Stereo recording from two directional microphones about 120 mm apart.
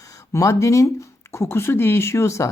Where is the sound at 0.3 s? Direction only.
25° left (ahead or behind).